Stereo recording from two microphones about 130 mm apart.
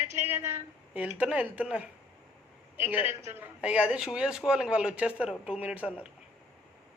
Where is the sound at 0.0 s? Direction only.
15° right (ahead or behind).